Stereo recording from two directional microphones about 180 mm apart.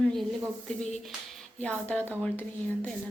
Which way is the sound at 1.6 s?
5° left (ahead or behind).